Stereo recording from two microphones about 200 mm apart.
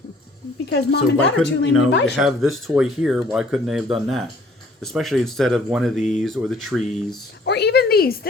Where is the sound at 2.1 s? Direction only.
Centre (ahead or behind).